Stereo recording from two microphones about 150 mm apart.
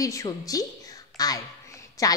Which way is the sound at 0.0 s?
20° left (ahead or behind).